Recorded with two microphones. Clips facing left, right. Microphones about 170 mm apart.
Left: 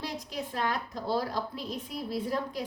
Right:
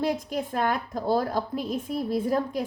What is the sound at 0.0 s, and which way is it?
A woman's voice, 50° right (ahead or behind).